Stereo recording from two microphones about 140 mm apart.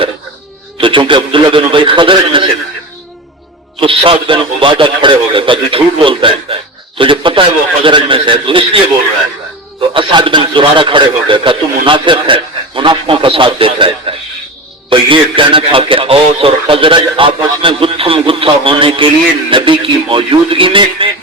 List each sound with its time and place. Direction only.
0.8 s a man's voice: 35° right (ahead or behind)
3.8 s a man's voice: 40° right (ahead or behind)
9.9 s a man's voice: 35° right (ahead or behind)